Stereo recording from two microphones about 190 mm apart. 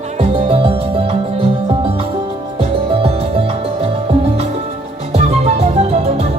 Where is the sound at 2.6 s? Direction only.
30° right (ahead or behind).